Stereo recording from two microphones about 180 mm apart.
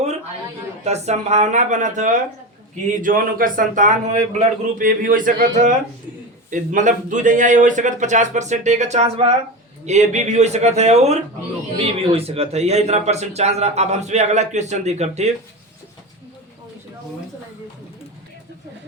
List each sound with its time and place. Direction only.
0.9 s speech: 40° right (ahead or behind)